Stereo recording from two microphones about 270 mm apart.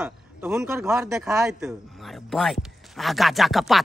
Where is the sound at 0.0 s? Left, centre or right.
Centre.